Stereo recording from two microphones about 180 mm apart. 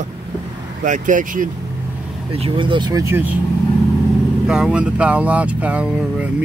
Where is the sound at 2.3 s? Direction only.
30° right (ahead or behind); by 3.4 s 10° right (ahead or behind).